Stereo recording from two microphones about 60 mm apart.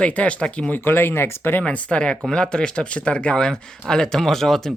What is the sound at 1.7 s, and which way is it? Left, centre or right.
Speech, left.